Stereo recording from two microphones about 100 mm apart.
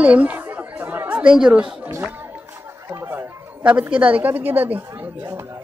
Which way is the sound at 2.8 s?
25° right (ahead or behind).